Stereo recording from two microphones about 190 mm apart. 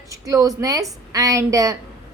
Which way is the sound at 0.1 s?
20° right (ahead or behind).